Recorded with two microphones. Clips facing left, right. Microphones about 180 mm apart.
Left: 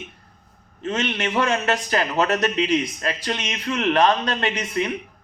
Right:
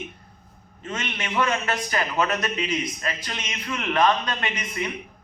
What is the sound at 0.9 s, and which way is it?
A man's voice, 40° left (ahead or behind).